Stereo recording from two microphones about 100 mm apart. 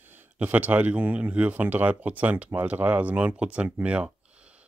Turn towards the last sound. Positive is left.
turn(degrees=-10)  # may be behind; listen again after turning